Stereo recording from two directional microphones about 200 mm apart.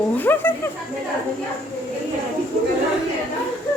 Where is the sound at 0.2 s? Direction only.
10° left (ahead or behind).